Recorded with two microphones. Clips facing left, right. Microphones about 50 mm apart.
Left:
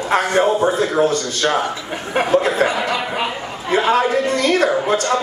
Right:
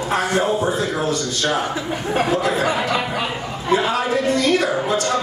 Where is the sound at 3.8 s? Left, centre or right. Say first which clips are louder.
Left 3 dB; left.